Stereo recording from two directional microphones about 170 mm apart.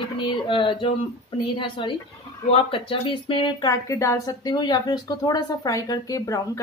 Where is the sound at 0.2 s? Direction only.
30° left (ahead or behind).